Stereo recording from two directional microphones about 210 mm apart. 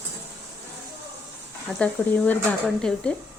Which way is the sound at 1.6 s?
5° left (ahead or behind).